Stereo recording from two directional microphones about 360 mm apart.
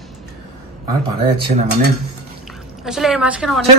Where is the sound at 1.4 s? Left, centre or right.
Right.